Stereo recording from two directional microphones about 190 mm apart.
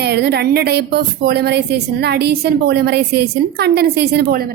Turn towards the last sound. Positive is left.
turn(degrees=-55)  # may be behind; listen again after turning